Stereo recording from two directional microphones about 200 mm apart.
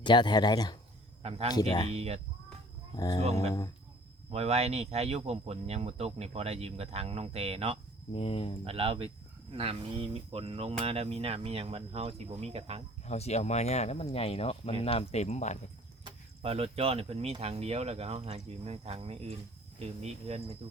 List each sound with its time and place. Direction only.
0.0 s speech: 20° left (ahead or behind)
1.2 s speech: 30° right (ahead or behind)
1.5 s speech: 20° left (ahead or behind)
1.9 s speech: 30° right (ahead or behind)
2.9 s speech: 20° left (ahead or behind)
4.3 s speech: 30° right (ahead or behind)
8.1 s speech: 30° left (ahead or behind)
8.6 s speech: 30° right (ahead or behind)
13.1 s speech: 35° left (ahead or behind)
16.0 s speech: 30° right (ahead or behind)